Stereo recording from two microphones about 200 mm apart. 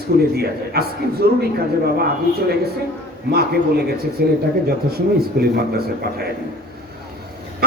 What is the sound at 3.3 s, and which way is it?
A man's voice, 50° right (ahead or behind).